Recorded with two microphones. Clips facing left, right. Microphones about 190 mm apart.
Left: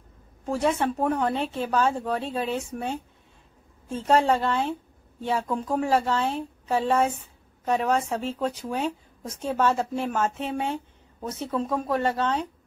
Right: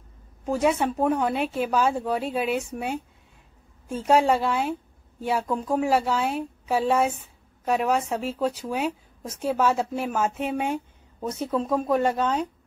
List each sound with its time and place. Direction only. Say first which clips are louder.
0.5 s speech: right 2 dB; 10° right (ahead or behind)
11.2 s speech: right 2 dB; 5° left (ahead or behind)
11.9 s speech: right 2 dB; 15° right (ahead or behind)